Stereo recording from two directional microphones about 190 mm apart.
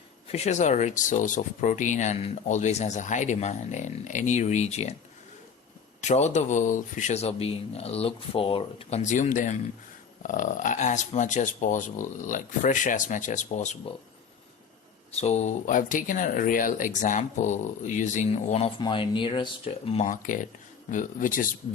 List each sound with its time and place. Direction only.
0.3 s speech: 35° left (ahead or behind)
6.0 s speech: 35° left (ahead or behind)
15.1 s speech: 35° left (ahead or behind)
18.8 s speech: 25° left (ahead or behind)
20.1 s speech: 45° left (ahead or behind)